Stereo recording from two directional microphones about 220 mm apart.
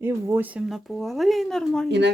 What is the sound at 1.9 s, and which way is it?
Speech, 50° right (ahead or behind).